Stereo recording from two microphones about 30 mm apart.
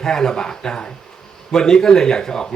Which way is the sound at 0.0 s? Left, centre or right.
Centre.